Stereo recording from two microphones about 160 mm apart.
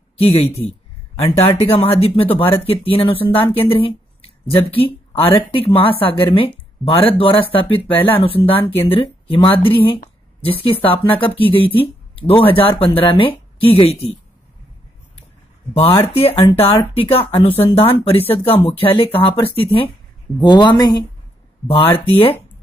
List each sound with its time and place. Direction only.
0.2 s speech: 40° left (ahead or behind)
16.5 s a woman's voice: 35° left (ahead or behind)